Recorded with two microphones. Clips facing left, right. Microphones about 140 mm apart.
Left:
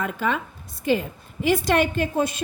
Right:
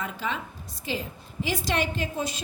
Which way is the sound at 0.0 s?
55° left (ahead or behind).